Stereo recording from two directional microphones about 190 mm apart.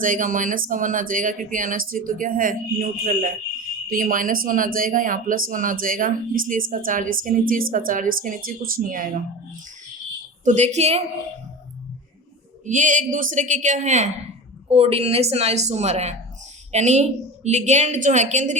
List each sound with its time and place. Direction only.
0.0 s speech: 45° right (ahead or behind)
10.4 s a woman's voice: 40° right (ahead or behind)
12.6 s a woman's voice: 40° right (ahead or behind)